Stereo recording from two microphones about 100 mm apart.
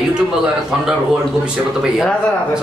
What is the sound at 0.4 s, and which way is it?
A man's voice, 5° right (ahead or behind).